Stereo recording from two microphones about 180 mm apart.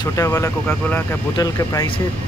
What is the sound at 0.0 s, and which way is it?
Speech, 15° left (ahead or behind).